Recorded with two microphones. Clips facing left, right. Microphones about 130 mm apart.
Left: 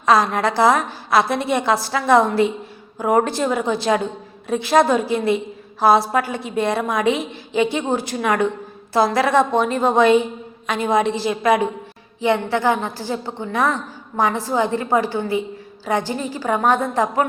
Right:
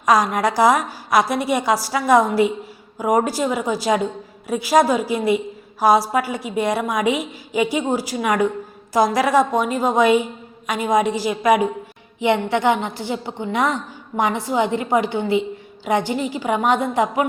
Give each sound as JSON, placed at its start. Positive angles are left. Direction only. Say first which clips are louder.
{"t": 0.0, "sound": "a woman's voice", "louder": "even", "side_deg": -15}
{"t": 16.4, "sound": "a woman's voice", "louder": "left 2 dB", "side_deg": 40}
{"t": 16.7, "sound": "a woman's voice", "louder": "even", "side_deg": -15}